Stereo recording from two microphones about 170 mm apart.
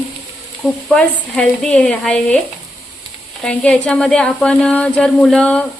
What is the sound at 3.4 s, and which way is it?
Speech, 5° left (ahead or behind).